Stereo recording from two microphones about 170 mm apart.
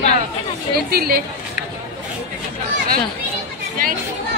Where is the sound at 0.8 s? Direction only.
60° right (ahead or behind).